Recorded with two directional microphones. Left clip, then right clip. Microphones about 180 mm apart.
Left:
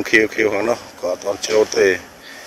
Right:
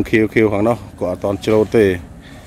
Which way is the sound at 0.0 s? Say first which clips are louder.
Right 1 dB; 10° right (ahead or behind).